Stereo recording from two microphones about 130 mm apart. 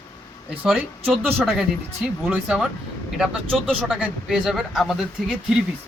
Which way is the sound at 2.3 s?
5° right (ahead or behind).